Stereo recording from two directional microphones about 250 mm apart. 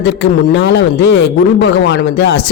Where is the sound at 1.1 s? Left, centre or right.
Left.